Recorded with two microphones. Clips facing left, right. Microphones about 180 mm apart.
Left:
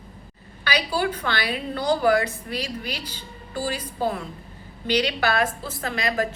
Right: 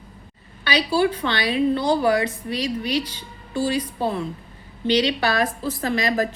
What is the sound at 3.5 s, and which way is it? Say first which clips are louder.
A woman's voice: right 5 dB; 25° right (ahead or behind).